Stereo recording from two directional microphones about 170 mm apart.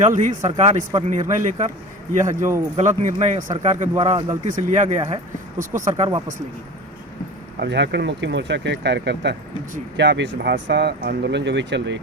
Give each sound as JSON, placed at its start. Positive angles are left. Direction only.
{"t": 0.0, "sound": "speech", "side_deg": -45}
{"t": 3.9, "sound": "speech", "side_deg": -30}
{"t": 4.4, "sound": "speech", "side_deg": -50}
{"t": 7.5, "sound": "speech", "side_deg": -80}